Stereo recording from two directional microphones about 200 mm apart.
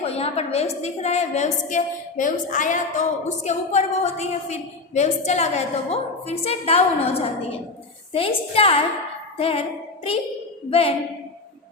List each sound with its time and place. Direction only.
0.0 s a woman's voice: 30° left (ahead or behind)
9.4 s child singing: 30° left (ahead or behind)
10.7 s a woman's voice: 30° left (ahead or behind)